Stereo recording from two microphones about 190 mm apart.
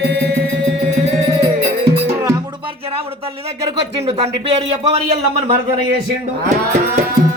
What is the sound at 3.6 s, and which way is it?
Speech, 30° right (ahead or behind).